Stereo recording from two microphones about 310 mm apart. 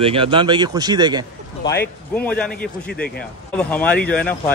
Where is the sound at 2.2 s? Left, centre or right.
Centre.